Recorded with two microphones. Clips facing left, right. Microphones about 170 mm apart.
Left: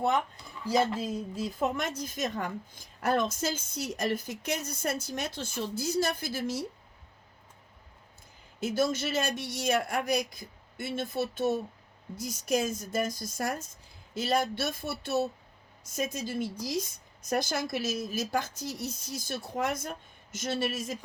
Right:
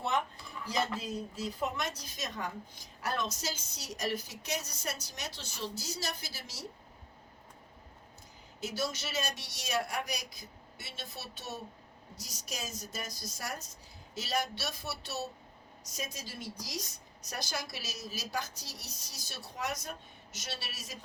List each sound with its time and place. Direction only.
0.8 s a woman's voice: 50° left (ahead or behind)
8.6 s a woman's voice: 50° left (ahead or behind)